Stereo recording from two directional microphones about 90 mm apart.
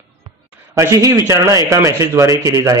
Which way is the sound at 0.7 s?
35° right (ahead or behind).